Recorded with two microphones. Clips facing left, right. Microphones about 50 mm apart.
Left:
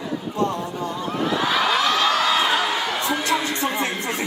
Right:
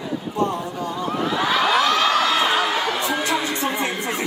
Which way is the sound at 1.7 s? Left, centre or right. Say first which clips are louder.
Right 2 dB; right.